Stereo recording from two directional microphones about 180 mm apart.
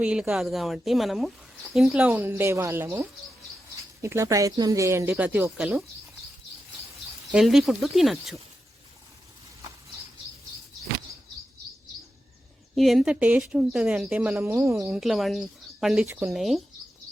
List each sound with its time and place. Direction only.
0.0 s a woman's voice: 5° right (ahead or behind)
7.3 s a woman's voice: centre (ahead or behind)
12.7 s speech: centre (ahead or behind)
14.8 s a woman's voice: 5° right (ahead or behind)